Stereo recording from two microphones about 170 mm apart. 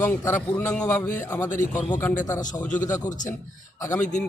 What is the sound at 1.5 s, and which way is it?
Speech, 50° left (ahead or behind).